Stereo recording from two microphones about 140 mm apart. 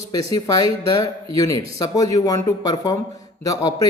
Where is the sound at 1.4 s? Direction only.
25° left (ahead or behind).